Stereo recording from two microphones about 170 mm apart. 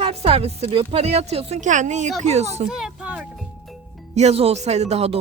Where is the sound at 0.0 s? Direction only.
35° right (ahead or behind).